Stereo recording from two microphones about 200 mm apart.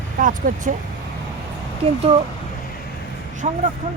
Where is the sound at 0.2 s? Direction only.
40° right (ahead or behind).